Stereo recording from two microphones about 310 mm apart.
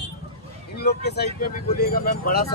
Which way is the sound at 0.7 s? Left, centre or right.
Left.